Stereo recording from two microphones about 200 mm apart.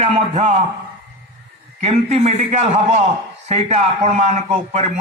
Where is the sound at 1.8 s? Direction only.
30° right (ahead or behind).